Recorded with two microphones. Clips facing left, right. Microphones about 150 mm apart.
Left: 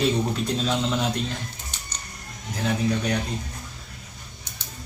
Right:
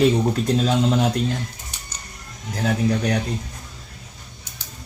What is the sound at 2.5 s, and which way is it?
Speech, 45° right (ahead or behind).